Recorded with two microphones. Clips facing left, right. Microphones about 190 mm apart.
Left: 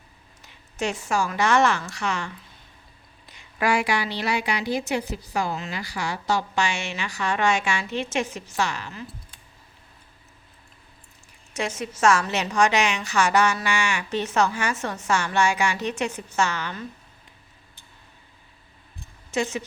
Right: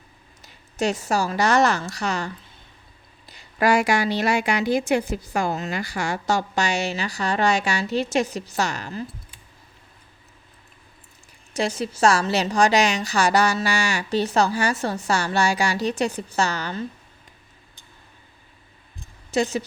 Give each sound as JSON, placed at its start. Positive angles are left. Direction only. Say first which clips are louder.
{"t": 0.4, "sound": "a woman's voice", "louder": "right 4 dB", "side_deg": -40}
{"t": 11.5, "sound": "a woman's voice", "louder": "right 4 dB", "side_deg": -35}
{"t": 19.3, "sound": "speech", "louder": "right 4 dB", "side_deg": -35}